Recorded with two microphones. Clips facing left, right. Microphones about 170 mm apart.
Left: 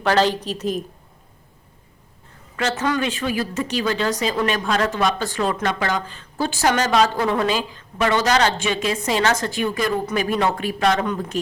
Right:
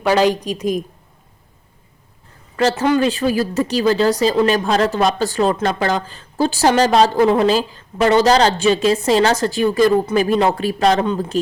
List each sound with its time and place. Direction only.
0.0 s a woman's voice: 10° right (ahead or behind)
2.6 s speech: 35° right (ahead or behind)